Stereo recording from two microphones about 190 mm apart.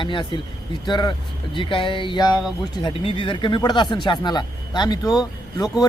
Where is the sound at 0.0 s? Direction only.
25° left (ahead or behind).